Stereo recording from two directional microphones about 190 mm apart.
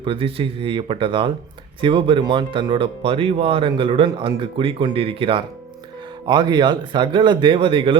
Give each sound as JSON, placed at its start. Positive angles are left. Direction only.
{"t": 0.0, "sound": "speech", "side_deg": -30}